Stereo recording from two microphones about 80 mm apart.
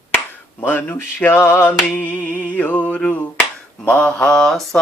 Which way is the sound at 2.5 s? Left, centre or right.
Centre.